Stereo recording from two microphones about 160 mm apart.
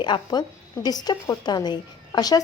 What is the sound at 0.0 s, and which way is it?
Speech, 25° left (ahead or behind).